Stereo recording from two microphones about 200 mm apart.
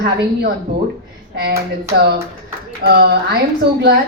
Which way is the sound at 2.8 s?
55° right (ahead or behind).